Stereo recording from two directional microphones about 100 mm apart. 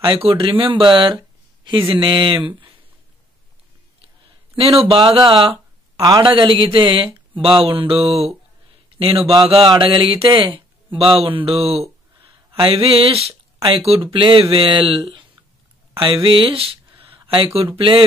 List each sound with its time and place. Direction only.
0.0 s speech: 55° right (ahead or behind)
4.6 s speech: 75° right (ahead or behind); by 5.6 s 55° right (ahead or behind)
5.9 s a man's voice: 35° right (ahead or behind)
6.2 s speech: 50° right (ahead or behind)
7.4 s a sound: 60° right (ahead or behind); by 8.4 s 85° right
8.9 s a man's voice: 65° right (ahead or behind); by 11.9 s 80° right
12.6 s a sound: 70° right (ahead or behind)
13.6 s speech: 65° right (ahead or behind)